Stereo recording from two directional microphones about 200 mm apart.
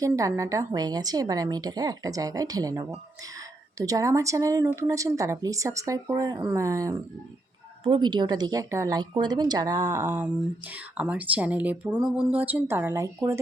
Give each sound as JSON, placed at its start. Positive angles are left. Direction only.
{"t": 0.0, "sound": "speech", "side_deg": -15}